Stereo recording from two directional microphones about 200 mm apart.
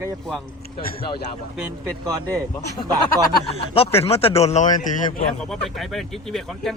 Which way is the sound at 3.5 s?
30° left (ahead or behind).